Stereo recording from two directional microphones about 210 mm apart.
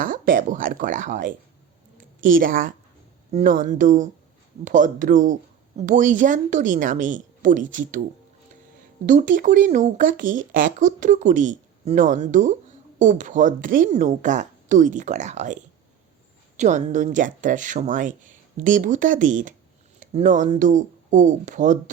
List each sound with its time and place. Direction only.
0.0 s speech: 40° right (ahead or behind)
9.0 s speech: 40° right (ahead or behind)
16.6 s speech: 35° right (ahead or behind)